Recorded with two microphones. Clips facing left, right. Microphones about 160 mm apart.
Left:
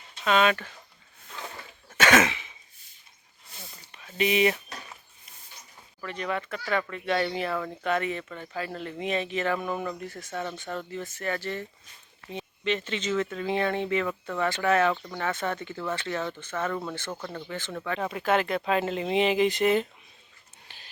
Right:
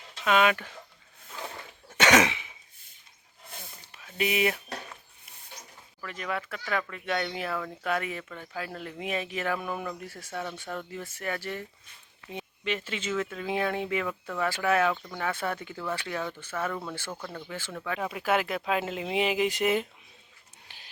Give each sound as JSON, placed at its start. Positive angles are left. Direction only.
{"t": 0.3, "sound": "speech", "side_deg": -10}
{"t": 1.9, "sound": "throat clearing", "side_deg": -20}
{"t": 3.9, "sound": "speech", "side_deg": -5}
{"t": 6.0, "sound": "speech", "side_deg": 0}
{"t": 20.7, "sound": "a sound", "side_deg": -15}